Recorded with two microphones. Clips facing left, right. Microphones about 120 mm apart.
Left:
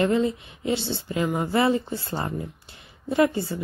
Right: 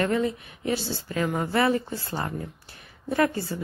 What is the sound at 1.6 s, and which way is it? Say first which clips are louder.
A woman's voice: left 1 dB; 25° left (ahead or behind).